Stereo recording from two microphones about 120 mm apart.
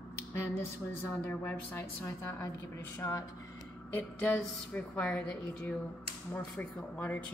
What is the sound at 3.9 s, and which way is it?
A woman's voice, 10° left (ahead or behind).